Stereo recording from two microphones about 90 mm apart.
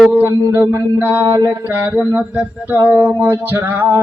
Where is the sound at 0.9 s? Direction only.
20° right (ahead or behind).